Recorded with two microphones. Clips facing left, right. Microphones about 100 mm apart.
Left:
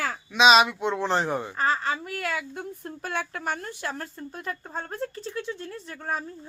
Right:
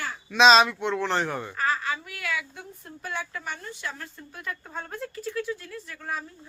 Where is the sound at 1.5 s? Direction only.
30° left (ahead or behind).